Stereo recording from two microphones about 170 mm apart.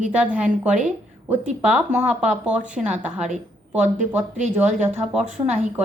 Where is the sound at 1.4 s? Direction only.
40° right (ahead or behind).